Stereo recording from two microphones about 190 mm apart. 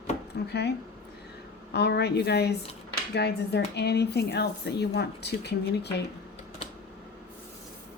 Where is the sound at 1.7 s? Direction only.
60° left (ahead or behind).